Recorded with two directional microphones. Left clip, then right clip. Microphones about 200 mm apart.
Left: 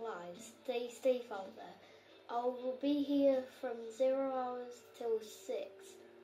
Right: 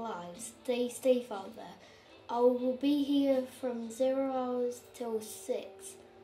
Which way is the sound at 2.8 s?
40° right (ahead or behind).